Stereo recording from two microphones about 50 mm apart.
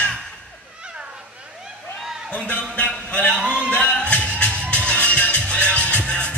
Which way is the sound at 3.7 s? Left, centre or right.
Left.